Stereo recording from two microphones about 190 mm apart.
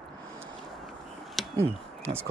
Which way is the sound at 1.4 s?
Centre (ahead or behind).